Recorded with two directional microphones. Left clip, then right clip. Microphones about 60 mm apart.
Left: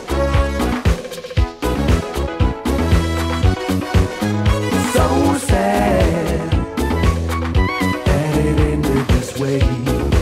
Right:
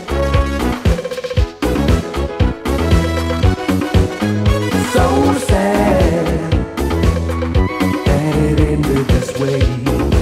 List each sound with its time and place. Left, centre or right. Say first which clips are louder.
0.3 s music: right 1 dB; left
3.4 s music: right 3 dB; left
7.8 s music: right 2 dB; left